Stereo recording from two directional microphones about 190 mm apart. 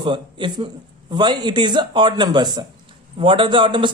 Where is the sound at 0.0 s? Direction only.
25° right (ahead or behind).